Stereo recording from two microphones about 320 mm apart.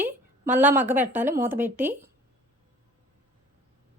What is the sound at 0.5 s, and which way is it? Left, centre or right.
Speech, centre.